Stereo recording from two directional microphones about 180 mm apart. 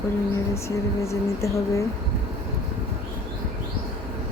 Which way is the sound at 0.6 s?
15° left (ahead or behind).